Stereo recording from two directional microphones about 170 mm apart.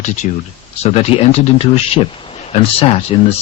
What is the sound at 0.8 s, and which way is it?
Speech, 35° left (ahead or behind).